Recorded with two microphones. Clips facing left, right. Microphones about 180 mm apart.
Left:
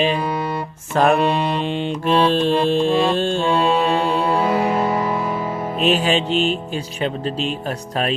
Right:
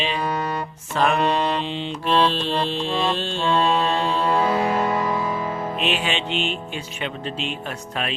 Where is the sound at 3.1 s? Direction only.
45° left (ahead or behind).